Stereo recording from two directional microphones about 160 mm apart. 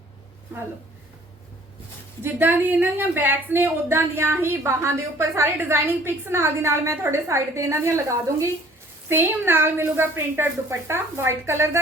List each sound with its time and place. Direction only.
0.5 s a woman's voice: 15° right (ahead or behind)
2.2 s a woman's voice: 10° right (ahead or behind)